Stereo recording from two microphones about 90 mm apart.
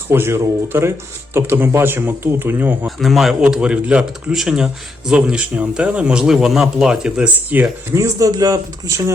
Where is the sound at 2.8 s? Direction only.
Centre (ahead or behind); by 7.7 s 20° right (ahead or behind).